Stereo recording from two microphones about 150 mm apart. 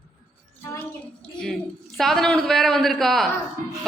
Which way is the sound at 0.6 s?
15° left (ahead or behind).